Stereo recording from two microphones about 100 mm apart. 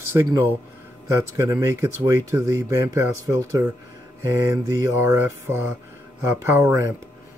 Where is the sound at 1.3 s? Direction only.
35° right (ahead or behind).